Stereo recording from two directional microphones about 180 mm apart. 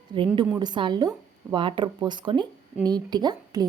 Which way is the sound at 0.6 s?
25° right (ahead or behind).